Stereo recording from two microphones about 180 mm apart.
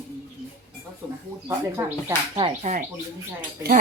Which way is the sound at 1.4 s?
15° right (ahead or behind).